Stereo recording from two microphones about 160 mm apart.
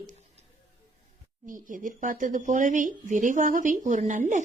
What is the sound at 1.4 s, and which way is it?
A woman's voice, 55° right (ahead or behind).